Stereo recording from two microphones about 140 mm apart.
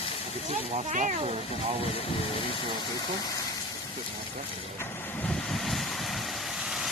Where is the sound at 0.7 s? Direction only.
55° right (ahead or behind).